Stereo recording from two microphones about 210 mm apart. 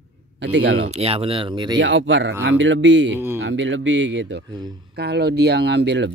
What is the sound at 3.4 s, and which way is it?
Speech, 60° right (ahead or behind).